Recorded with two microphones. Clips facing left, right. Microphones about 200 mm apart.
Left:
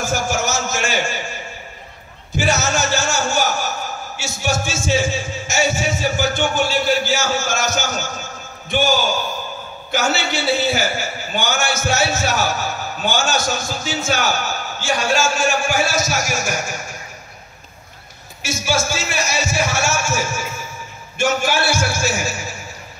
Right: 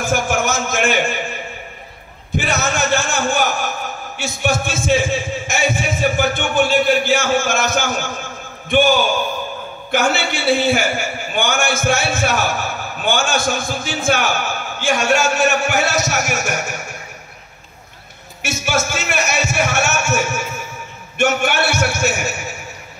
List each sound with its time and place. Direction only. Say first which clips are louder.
0.0 s a sound: right 2 dB; 55° right (ahead or behind)
2.3 s a man's voice: left 1 dB; 55° right (ahead or behind)
18.4 s a man's voice: right 1 dB; 65° right (ahead or behind)